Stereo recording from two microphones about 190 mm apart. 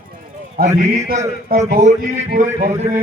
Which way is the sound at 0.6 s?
50° right (ahead or behind).